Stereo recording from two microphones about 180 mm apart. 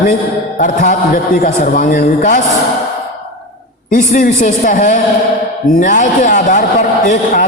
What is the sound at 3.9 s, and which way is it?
A man's voice, 50° left (ahead or behind).